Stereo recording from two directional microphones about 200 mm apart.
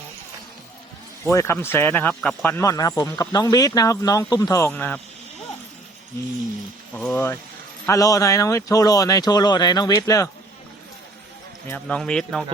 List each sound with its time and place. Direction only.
1.2 s speech: 15° left (ahead or behind)
6.9 s speech: 5° left (ahead or behind)
7.9 s speech: 15° left (ahead or behind)
11.7 s speech: 5° left (ahead or behind)